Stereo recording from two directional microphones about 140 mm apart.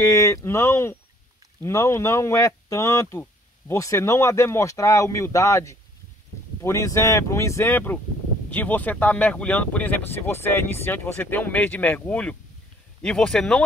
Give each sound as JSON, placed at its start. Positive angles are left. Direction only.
{"t": 0.0, "sound": "speech", "side_deg": 20}